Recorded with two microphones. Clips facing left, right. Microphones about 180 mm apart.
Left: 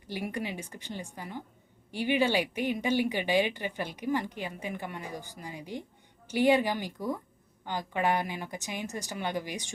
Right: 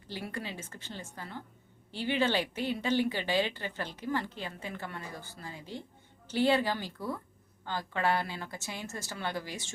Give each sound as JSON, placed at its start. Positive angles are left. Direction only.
{"t": 0.1, "sound": "speech", "side_deg": 15}